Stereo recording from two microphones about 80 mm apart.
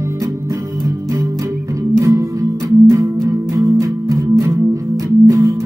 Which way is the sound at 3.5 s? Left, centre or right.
Right.